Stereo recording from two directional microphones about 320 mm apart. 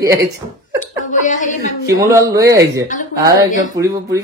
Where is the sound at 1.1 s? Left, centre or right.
Left.